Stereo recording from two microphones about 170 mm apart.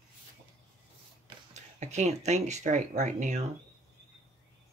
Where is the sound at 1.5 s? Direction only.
40° right (ahead or behind).